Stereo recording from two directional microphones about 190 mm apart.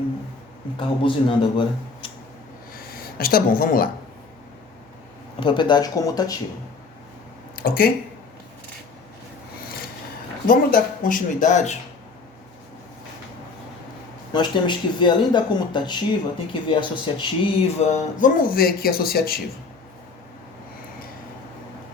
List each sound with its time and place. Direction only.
0.8 s speech: 25° left (ahead or behind)
2.7 s a sound: 50° left (ahead or behind)
5.4 s speech: 25° left (ahead or behind)
7.5 s speech: 50° left (ahead or behind)
10.4 s speech: 50° left (ahead or behind)
14.3 s speech: 25° left (ahead or behind); by 19.4 s 55° left (ahead or behind)